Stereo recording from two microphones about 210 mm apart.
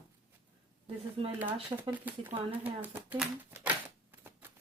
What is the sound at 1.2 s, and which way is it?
Speech, 25° right (ahead or behind).